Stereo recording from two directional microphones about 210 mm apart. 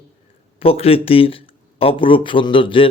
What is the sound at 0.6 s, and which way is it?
A man's voice, 25° left (ahead or behind).